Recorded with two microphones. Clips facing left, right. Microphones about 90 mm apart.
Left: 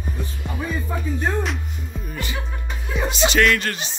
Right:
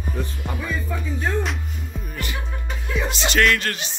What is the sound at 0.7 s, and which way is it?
Music, 25° left (ahead or behind).